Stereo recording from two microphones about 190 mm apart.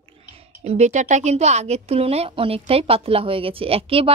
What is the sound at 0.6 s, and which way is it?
Speech, 35° right (ahead or behind).